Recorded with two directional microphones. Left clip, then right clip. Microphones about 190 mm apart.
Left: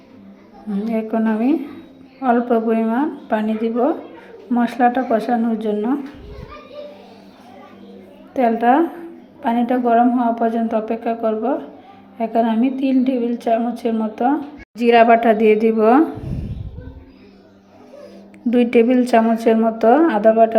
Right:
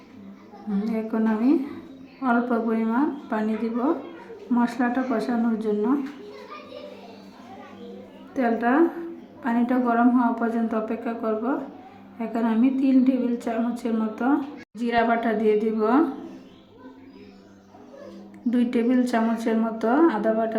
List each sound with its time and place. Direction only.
0.9 s a woman's voice: 20° left (ahead or behind)
2.2 s a woman's voice: 20° left (ahead or behind)
8.3 s a woman's voice: 20° left (ahead or behind)
18.5 s a woman's voice: 20° left (ahead or behind)